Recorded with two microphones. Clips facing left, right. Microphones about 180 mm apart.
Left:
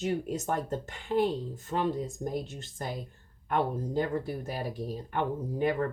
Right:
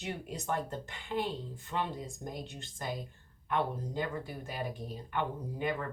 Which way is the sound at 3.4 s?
40° left (ahead or behind).